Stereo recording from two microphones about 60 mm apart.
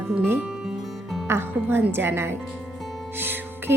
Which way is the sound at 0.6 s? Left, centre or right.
Centre.